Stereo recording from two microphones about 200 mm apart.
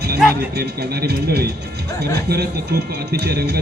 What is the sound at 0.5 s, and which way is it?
Speech, 55° right (ahead or behind).